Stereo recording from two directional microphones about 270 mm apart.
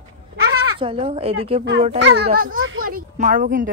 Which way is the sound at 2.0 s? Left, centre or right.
Right.